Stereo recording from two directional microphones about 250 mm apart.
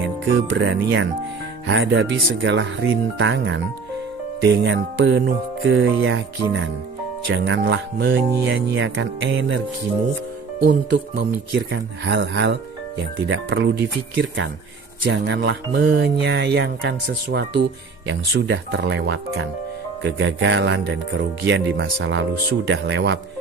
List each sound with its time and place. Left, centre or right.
0.5 s speech: right
10.6 s speech: right
15.0 s speech: right